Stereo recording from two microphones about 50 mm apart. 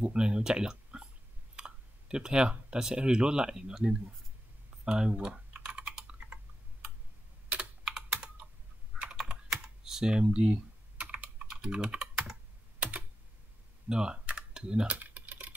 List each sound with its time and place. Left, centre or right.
0.0 s speech: centre
1.6 s clicking: centre
2.7 s speech: centre
4.8 s typing: centre
7.8 s computer keyboard: centre
9.1 s typing: centre
11.0 s computer keyboard: right
11.6 s typing: centre
12.7 s computer keyboard: right
13.8 s speech: centre
15.0 s typing: right